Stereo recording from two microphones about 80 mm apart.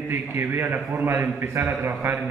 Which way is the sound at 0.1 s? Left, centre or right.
Right.